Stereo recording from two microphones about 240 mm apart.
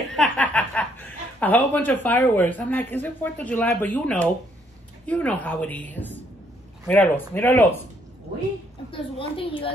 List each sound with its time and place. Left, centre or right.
0.1 s a woman's voice: centre
8.9 s a woman's voice: left